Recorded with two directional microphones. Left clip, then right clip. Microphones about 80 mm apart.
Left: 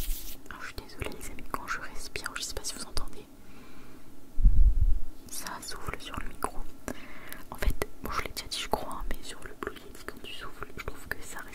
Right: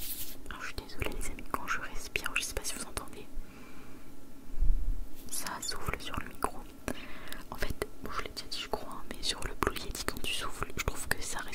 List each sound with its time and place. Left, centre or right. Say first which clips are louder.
0.5 s whispering: even; centre
5.3 s whispering: right 1 dB; centre
7.5 s whispering: left 2 dB; centre
8.0 s whispering: left 4 dB; left
9.2 s whispering: right 8 dB; right
9.5 s whispering: right 5 dB; right; by 11.5 s centre